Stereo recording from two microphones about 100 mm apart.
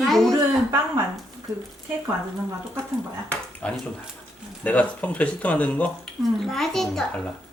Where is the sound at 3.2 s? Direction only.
10° left (ahead or behind).